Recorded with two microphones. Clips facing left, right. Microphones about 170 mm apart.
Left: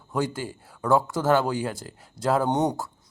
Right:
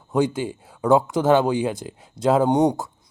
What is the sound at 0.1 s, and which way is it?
A man's voice, 20° right (ahead or behind).